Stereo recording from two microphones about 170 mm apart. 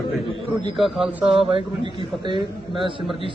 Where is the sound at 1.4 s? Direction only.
30° right (ahead or behind).